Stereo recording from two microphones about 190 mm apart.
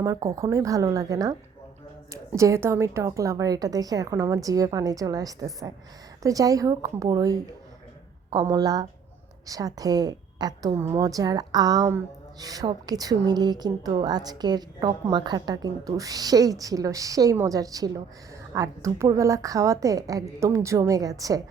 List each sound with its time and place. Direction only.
0.0 s a woman's voice: 20° right (ahead or behind)